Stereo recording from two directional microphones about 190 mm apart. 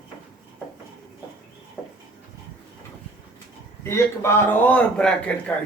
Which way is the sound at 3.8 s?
15° left (ahead or behind).